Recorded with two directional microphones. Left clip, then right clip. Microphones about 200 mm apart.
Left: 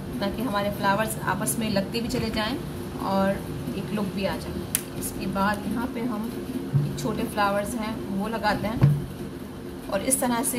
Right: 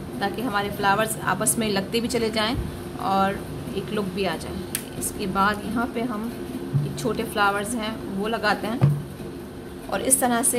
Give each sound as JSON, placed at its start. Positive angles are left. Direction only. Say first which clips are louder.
{"t": 0.2, "sound": "a woman's voice", "louder": "right 2 dB", "side_deg": -45}
{"t": 7.0, "sound": "a woman's voice", "louder": "right 3 dB", "side_deg": -50}
{"t": 9.8, "sound": "a woman's voice", "louder": "right 3 dB", "side_deg": -45}